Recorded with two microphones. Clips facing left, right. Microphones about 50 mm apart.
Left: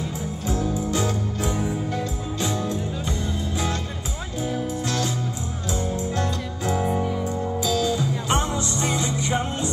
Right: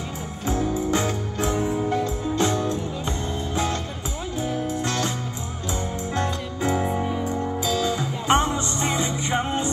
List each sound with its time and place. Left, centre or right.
0.5 s music: right